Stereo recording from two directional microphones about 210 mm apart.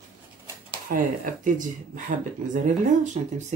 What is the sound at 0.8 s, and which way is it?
Speech, 40° right (ahead or behind).